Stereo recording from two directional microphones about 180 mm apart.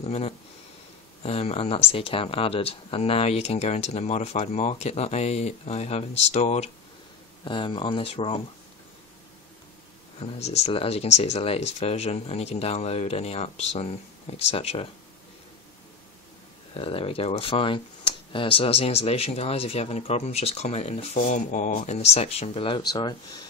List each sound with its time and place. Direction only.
0.0 s speech: 35° left (ahead or behind)
7.4 s speech: 25° left (ahead or behind)
10.2 s speech: 35° left (ahead or behind)
16.7 s speech: 30° left (ahead or behind)